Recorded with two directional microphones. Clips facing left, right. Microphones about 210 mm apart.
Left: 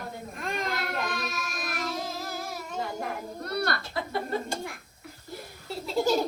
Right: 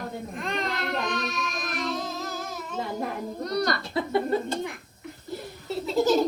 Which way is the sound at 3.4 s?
5° left (ahead or behind).